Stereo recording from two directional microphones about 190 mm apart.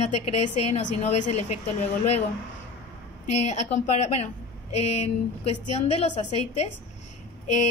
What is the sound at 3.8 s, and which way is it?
A woman's voice, 35° left (ahead or behind).